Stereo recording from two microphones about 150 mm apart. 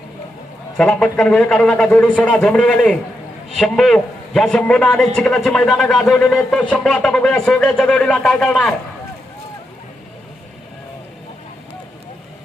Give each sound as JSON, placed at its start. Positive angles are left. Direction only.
{"t": 0.8, "sound": "a man's voice", "side_deg": 5}